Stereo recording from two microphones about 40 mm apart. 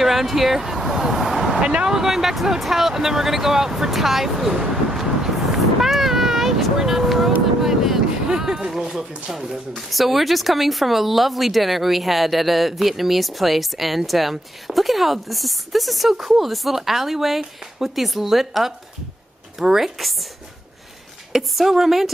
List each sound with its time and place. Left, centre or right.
0.0 s vehicle: centre
1.6 s speech: right
1.9 s speech: centre
5.8 s a sound: centre
6.8 s speech: centre
7.6 s vehicle: centre
8.3 s speech: centre
21.3 s speech: centre